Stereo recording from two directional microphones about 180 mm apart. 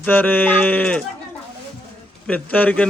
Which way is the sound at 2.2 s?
10° left (ahead or behind).